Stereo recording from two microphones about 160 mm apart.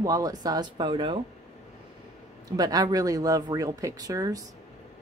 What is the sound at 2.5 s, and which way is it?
A woman's voice, 25° right (ahead or behind).